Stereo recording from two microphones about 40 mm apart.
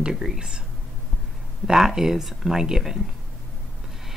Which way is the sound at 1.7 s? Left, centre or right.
Centre.